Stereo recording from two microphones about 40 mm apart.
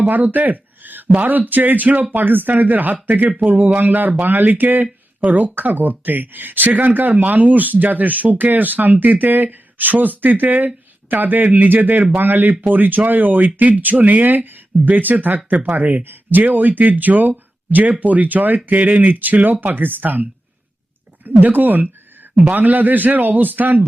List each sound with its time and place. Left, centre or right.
0.1 s speech: right
14.8 s speech: right
21.2 s speech: right